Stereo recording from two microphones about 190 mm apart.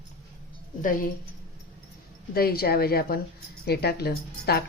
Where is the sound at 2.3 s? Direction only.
55° left (ahead or behind).